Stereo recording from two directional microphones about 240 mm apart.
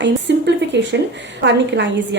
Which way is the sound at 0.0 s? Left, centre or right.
Right.